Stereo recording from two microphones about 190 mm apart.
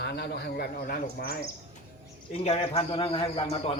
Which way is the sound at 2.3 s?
30° left (ahead or behind).